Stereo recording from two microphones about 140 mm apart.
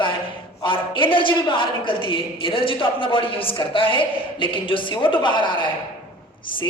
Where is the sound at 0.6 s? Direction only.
35° left (ahead or behind).